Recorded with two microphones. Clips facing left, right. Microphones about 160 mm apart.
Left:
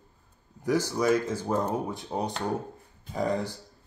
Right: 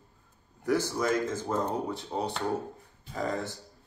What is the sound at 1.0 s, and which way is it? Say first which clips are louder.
Speech: left 3 dB; 10° left (ahead or behind).